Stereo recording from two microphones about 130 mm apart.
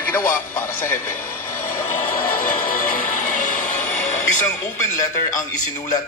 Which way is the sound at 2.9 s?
80° left.